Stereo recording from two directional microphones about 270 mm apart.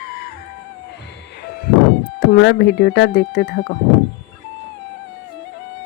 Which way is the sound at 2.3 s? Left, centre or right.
Left.